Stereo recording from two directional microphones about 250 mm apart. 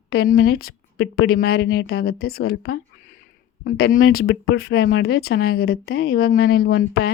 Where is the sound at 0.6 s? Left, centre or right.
Left.